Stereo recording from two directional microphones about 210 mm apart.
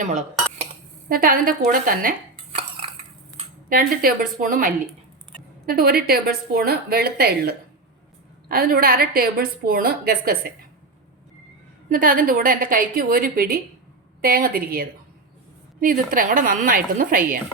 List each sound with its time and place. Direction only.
1.0 s a woman's voice: 45° right (ahead or behind)
3.7 s a woman's voice: 40° right (ahead or behind)
11.9 s a woman's voice: 40° right (ahead or behind)